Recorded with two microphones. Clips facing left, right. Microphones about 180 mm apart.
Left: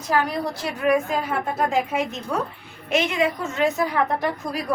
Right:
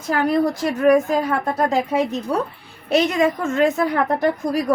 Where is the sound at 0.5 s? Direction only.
45° right (ahead or behind).